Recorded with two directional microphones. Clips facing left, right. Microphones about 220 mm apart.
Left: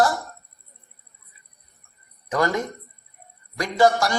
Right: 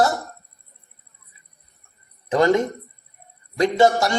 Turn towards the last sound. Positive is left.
turn(degrees=-25)  # may be behind; listen again after turning